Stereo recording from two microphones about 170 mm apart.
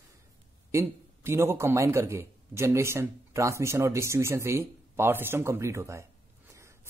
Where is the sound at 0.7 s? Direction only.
15° right (ahead or behind).